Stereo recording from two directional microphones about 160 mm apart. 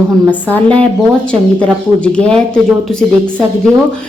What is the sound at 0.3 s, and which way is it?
A woman's voice, 10° left (ahead or behind).